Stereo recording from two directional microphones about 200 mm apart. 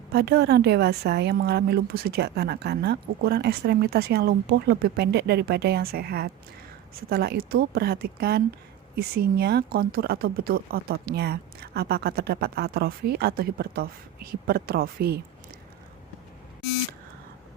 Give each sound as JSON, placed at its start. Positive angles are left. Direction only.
{"t": 0.1, "sound": "a woman's voice", "side_deg": -55}